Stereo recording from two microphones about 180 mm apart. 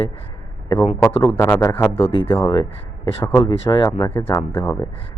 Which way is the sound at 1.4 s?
15° left (ahead or behind).